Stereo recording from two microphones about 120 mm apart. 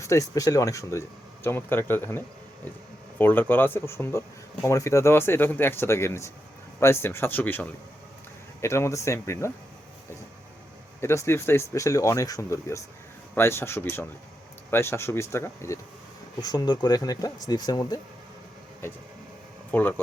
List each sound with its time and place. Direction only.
0.0 s speech: 25° left (ahead or behind)
11.0 s speech: 25° left (ahead or behind)
16.4 s speech: 35° left (ahead or behind)
19.7 s speech: 15° left (ahead or behind)